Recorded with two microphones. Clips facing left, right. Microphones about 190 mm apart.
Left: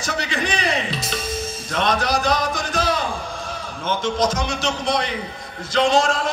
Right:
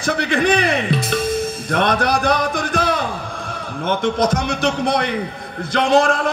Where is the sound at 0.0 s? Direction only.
55° right (ahead or behind).